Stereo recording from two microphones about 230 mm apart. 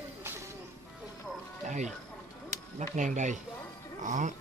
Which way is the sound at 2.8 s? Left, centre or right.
Right.